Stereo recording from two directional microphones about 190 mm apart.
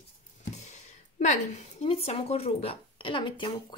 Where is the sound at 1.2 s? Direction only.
40° left (ahead or behind).